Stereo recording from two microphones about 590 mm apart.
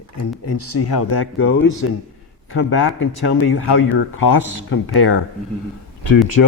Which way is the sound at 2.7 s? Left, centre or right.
Left.